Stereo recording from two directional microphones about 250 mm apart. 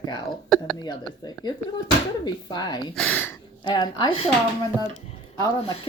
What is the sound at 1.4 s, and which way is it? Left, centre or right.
Speech, centre.